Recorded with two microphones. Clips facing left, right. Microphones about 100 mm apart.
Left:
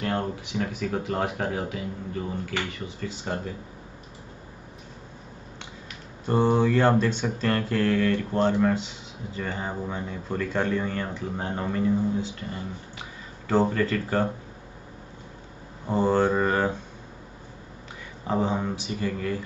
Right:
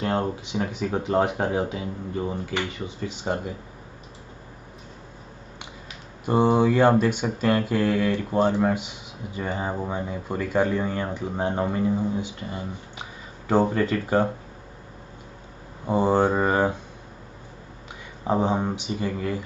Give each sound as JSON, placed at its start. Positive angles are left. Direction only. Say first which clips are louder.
{"t": 0.0, "sound": "speech", "louder": "right 3 dB", "side_deg": -20}
{"t": 6.2, "sound": "speech", "louder": "right 2 dB", "side_deg": -15}
{"t": 15.9, "sound": "speech", "louder": "right 2 dB", "side_deg": -15}
{"t": 18.2, "sound": "speech", "louder": "right 3 dB", "side_deg": -20}